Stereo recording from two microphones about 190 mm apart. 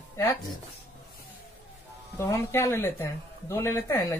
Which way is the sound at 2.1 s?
15° left (ahead or behind).